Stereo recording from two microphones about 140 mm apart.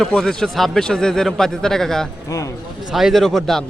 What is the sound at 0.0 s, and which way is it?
Speech, 5° left (ahead or behind).